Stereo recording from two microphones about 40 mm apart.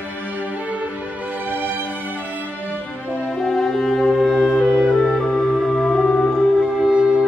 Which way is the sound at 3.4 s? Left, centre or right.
Centre.